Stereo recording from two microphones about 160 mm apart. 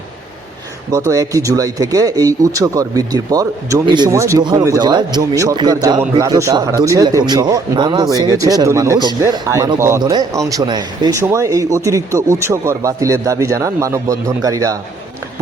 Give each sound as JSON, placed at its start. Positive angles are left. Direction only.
{"t": 0.9, "sound": "speech", "side_deg": -20}